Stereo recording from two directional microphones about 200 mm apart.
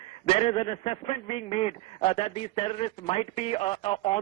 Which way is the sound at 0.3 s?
30° left (ahead or behind).